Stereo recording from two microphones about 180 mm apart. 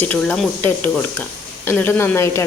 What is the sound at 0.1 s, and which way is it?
A woman's voice, 5° left (ahead or behind).